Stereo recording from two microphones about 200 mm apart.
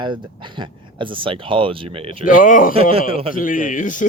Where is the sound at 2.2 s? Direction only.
40° left (ahead or behind).